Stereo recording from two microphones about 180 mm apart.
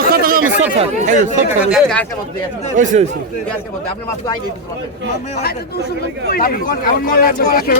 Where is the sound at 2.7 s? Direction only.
45° right (ahead or behind).